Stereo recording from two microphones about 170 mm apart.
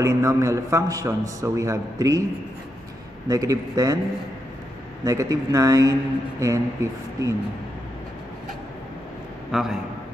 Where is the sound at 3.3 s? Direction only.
20° right (ahead or behind).